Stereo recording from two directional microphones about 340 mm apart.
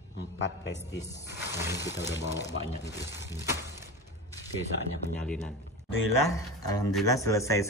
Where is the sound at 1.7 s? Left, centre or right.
Left.